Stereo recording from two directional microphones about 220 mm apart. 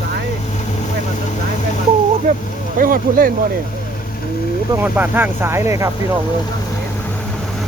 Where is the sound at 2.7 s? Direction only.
40° right (ahead or behind).